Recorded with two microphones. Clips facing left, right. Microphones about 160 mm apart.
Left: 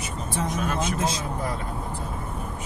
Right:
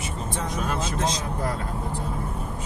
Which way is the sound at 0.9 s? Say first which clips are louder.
Even; 10° left (ahead or behind).